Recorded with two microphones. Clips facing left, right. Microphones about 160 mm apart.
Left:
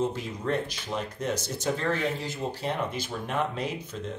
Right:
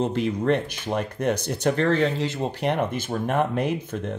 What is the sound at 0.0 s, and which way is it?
Speech, 65° right (ahead or behind).